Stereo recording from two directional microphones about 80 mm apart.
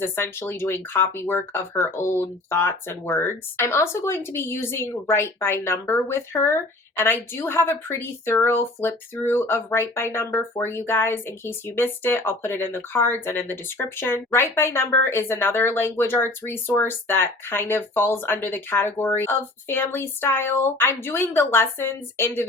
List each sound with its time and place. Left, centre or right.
0.0 s a woman's voice: left
8.5 s a woman's voice: left